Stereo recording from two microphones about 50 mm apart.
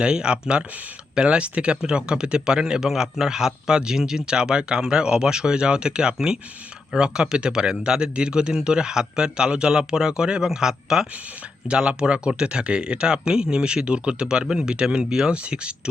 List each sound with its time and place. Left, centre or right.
0.0 s speech: centre